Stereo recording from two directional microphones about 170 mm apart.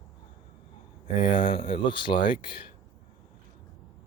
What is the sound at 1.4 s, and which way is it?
Speech, 60° left (ahead or behind).